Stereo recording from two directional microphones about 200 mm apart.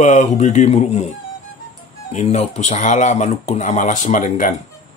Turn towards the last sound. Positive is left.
turn(degrees=40)  # may be behind; listen again after turning